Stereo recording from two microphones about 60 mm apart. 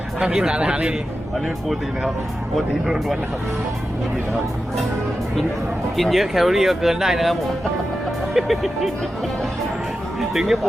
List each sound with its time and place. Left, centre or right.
0.2 s a man's voice: centre
2.6 s speech: centre
6.0 s speech: centre
10.2 s speech: centre